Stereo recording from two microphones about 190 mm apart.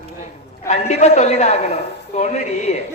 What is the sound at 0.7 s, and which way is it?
A man's voice, 35° left (ahead or behind).